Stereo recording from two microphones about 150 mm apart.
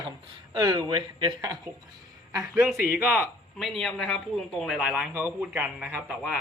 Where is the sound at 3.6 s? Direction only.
Centre (ahead or behind).